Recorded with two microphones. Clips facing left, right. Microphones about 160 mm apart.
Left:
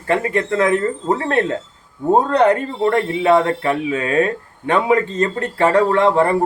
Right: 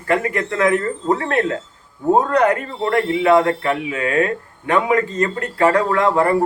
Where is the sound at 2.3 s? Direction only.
30° left (ahead or behind).